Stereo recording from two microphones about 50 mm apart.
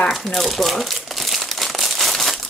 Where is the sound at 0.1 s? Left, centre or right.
Centre.